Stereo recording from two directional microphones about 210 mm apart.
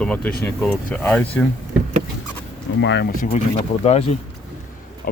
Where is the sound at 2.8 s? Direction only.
60° left (ahead or behind).